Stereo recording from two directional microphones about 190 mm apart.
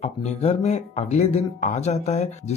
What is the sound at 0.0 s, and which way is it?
Speech, 35° left (ahead or behind).